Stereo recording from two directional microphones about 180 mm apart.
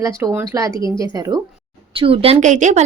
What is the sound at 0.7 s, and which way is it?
Speech, 25° left (ahead or behind).